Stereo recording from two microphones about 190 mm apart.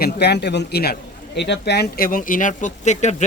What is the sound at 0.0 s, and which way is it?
Speech, 60° left (ahead or behind).